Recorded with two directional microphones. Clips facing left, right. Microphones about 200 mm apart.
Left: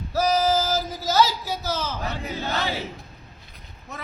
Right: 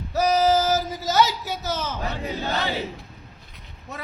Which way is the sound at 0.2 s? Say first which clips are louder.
Right 2 dB; 20° right (ahead or behind).